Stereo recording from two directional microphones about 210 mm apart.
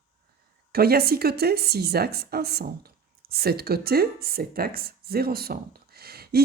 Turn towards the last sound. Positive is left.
turn(degrees=-50)  # may be behind; listen again after turning